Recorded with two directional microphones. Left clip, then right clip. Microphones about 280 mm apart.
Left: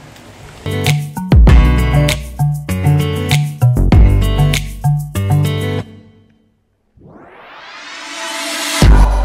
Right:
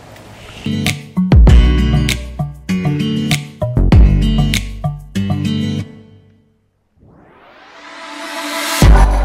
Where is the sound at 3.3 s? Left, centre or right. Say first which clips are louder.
Left 1 dB; centre.